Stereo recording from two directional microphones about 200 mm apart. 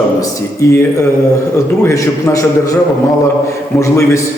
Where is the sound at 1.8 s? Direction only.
15° left (ahead or behind).